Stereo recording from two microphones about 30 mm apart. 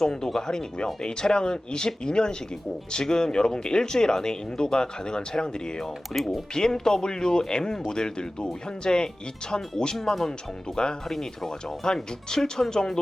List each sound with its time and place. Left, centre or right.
0.0 s speech: left
9.9 s speech: centre
10.8 s speech: left
11.9 s speech: centre